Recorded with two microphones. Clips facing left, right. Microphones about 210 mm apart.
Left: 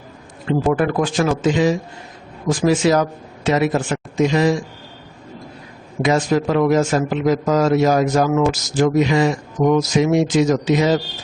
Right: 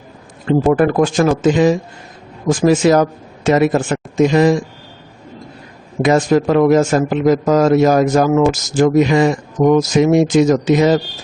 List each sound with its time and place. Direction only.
0.7 s a man's voice: 45° right (ahead or behind)
6.0 s a man's voice: 50° right (ahead or behind)